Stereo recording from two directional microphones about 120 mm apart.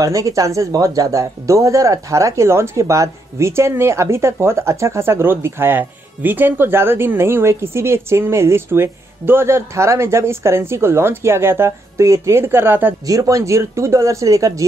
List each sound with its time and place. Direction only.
0.0 s speech: 30° right (ahead or behind)
13.0 s speech: 30° right (ahead or behind)